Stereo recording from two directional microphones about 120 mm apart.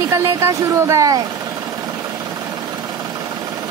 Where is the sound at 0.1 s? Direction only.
25° right (ahead or behind).